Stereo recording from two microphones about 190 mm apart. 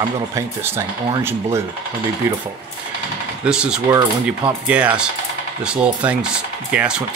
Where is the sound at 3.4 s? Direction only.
5° right (ahead or behind).